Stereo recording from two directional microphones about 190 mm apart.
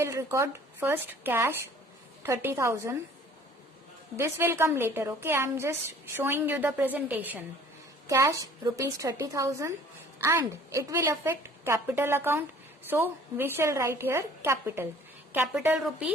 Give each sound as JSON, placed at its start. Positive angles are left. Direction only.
{"t": 0.0, "sound": "a woman's voice", "side_deg": -15}
{"t": 4.2, "sound": "a woman's voice", "side_deg": -15}